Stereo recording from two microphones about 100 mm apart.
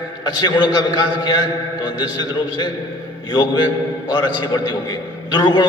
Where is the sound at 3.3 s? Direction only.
50° left (ahead or behind).